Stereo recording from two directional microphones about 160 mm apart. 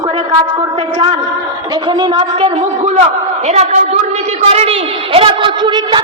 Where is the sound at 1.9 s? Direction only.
30° right (ahead or behind).